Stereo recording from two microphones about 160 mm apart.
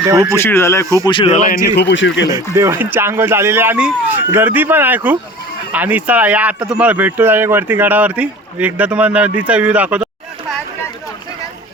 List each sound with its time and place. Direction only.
0.0 s speech: 20° right (ahead or behind)
0.3 s speech: 15° left (ahead or behind)
1.0 s speech: 30° left (ahead or behind)
1.3 s a man's voice: 50° left (ahead or behind)
1.6 s speech: 90° left
2.3 s speech: 15° right (ahead or behind)